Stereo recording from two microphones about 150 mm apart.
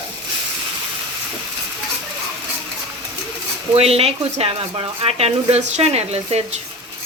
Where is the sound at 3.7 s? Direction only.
40° right (ahead or behind).